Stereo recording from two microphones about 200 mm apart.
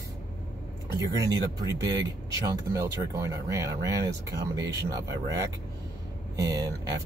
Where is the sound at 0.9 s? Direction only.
20° right (ahead or behind).